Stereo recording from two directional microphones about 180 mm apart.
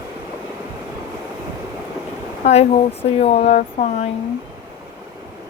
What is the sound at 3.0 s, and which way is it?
Speech, 35° left (ahead or behind).